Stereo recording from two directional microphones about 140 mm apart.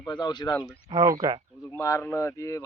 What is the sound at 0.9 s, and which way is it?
Speech, 25° right (ahead or behind).